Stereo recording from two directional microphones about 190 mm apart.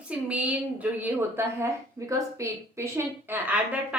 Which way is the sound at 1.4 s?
15° right (ahead or behind).